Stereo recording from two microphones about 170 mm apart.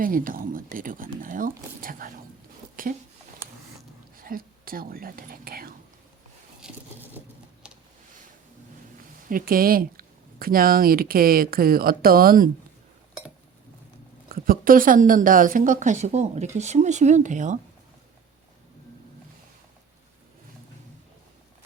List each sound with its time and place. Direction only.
0.0 s a woman's voice: 55° right (ahead or behind)
4.2 s speech: 60° right (ahead or behind)
6.6 s a sound: 10° right (ahead or behind)
9.3 s speech: 60° right (ahead or behind)
14.3 s a woman's voice: 60° right (ahead or behind)